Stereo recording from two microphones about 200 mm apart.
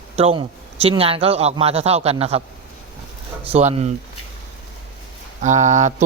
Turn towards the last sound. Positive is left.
turn(degrees=-35)  # may be behind; listen again after turning